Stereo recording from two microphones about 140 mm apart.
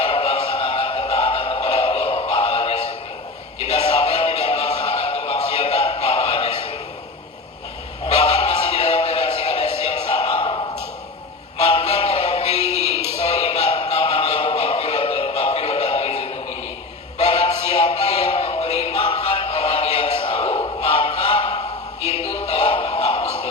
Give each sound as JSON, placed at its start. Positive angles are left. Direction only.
{"t": 0.0, "sound": "music", "side_deg": 40}
{"t": 8.0, "sound": "music", "side_deg": 45}
{"t": 9.8, "sound": "a sound", "side_deg": 45}
{"t": 11.6, "sound": "music", "side_deg": 45}
{"t": 12.6, "sound": "music", "side_deg": -20}
{"t": 13.1, "sound": "a sound", "side_deg": 50}
{"t": 20.7, "sound": "music", "side_deg": 40}